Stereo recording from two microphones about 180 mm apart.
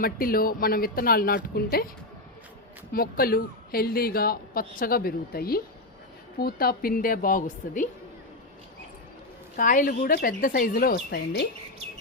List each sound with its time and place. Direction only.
0.0 s a woman's voice: 55° left (ahead or behind)
2.9 s a woman's voice: 55° left (ahead or behind)
9.6 s a woman's voice: 50° left (ahead or behind)